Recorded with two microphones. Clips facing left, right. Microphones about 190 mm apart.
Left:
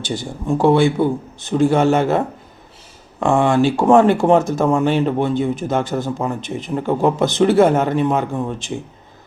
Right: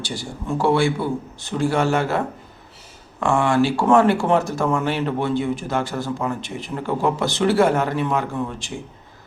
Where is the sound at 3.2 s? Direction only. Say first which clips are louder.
Left 3 dB; 20° left (ahead or behind).